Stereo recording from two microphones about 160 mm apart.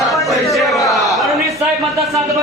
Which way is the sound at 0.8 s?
20° left (ahead or behind).